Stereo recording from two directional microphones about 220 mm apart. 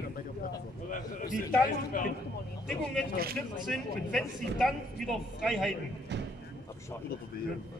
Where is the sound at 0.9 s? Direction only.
35° left (ahead or behind).